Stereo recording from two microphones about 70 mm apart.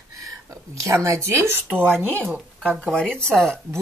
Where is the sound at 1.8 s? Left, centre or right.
Right.